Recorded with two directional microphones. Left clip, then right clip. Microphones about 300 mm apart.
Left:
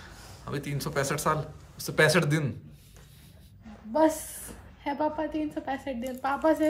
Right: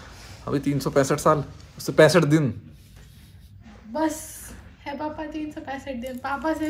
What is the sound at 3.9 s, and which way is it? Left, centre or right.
A woman's voice, left.